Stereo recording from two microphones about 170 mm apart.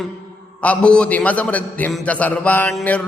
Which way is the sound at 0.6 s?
5° left (ahead or behind).